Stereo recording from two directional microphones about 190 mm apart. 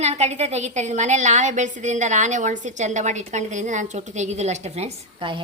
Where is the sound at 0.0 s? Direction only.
35° right (ahead or behind).